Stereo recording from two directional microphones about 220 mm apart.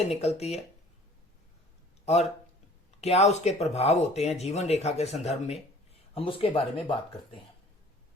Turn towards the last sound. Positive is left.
turn(degrees=25)  # may be behind; listen again after turning